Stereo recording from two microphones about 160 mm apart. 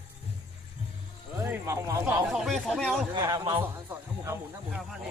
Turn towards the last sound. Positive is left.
turn(degrees=-25)  # may be behind; listen again after turning